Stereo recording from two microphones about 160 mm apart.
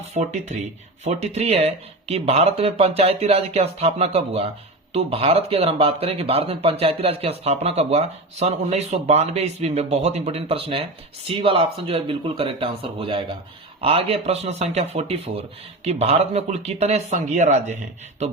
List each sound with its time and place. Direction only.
0.1 s speech: 45° right (ahead or behind)